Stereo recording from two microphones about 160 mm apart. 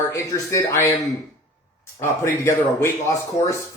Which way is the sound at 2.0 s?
20° left (ahead or behind).